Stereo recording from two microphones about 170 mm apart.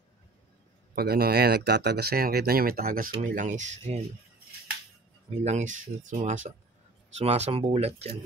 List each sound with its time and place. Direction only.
0.9 s speech: 65° right (ahead or behind); by 4.0 s 40° right (ahead or behind)
5.3 s speech: 40° right (ahead or behind)